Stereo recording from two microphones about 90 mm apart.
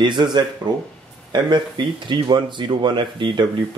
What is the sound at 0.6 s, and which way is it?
Speech, 50° right (ahead or behind).